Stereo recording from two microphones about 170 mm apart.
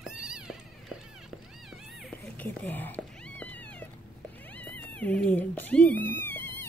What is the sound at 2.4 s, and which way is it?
Cat, 10° left (ahead or behind).